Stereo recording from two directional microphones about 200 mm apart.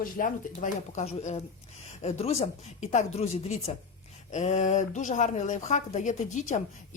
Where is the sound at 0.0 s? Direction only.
40° left (ahead or behind).